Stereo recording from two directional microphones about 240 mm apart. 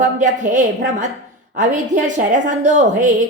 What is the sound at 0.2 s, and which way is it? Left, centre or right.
A woman's voice, right.